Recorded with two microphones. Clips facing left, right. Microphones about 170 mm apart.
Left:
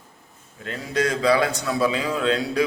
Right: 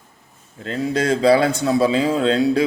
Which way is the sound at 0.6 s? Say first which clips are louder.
Right 4 dB; 30° right (ahead or behind).